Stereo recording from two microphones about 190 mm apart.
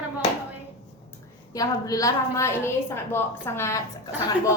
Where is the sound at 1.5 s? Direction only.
20° left (ahead or behind).